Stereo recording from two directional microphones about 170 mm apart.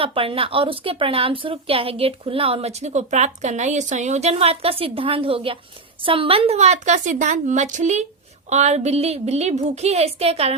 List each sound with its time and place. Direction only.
0.0 s a woman's voice: 30° right (ahead or behind)